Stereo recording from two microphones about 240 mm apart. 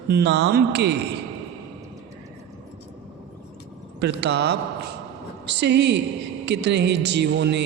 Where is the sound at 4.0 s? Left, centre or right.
Right.